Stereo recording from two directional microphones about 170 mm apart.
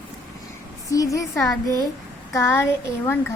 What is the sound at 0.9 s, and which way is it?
Speech, 20° left (ahead or behind).